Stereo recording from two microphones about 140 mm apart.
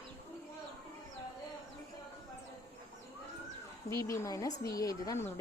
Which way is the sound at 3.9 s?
20° left (ahead or behind).